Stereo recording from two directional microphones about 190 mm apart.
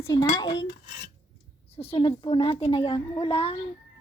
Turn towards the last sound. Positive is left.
turn(degrees=30)  # may be behind; listen again after turning